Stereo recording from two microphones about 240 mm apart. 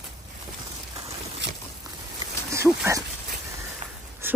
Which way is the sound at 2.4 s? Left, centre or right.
Centre.